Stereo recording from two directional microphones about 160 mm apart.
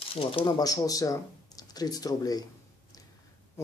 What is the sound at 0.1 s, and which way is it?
Speech, 35° left (ahead or behind).